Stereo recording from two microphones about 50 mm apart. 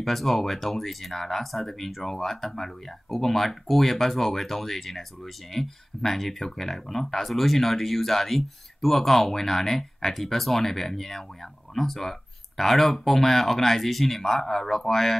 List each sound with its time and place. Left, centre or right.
0.0 s speech: centre